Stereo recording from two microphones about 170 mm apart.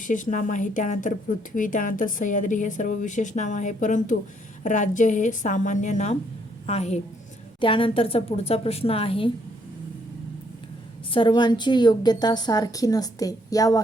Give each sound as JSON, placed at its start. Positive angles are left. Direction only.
{"t": 0.0, "sound": "a woman's voice", "side_deg": 50}
{"t": 11.1, "sound": "a woman's voice", "side_deg": 30}